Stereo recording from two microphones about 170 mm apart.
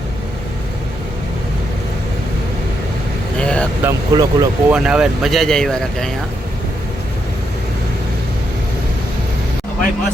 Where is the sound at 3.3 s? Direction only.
5° left (ahead or behind).